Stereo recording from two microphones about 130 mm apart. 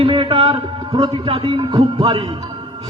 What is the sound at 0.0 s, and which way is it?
A man's voice, 40° right (ahead or behind).